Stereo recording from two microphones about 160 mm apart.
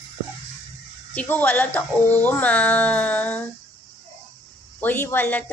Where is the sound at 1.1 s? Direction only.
10° left (ahead or behind).